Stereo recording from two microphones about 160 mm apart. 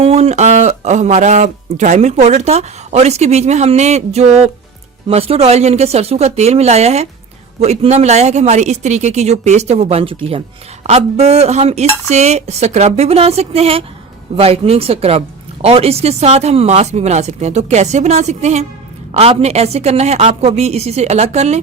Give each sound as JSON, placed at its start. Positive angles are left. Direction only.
{"t": 0.0, "sound": "a woman's voice", "side_deg": -40}